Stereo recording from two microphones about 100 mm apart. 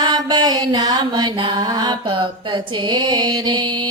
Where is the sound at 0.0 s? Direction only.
45° right (ahead or behind).